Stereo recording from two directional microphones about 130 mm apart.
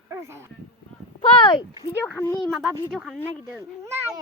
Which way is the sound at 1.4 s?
40° left (ahead or behind).